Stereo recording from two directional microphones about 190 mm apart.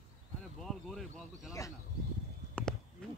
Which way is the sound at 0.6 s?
Centre (ahead or behind).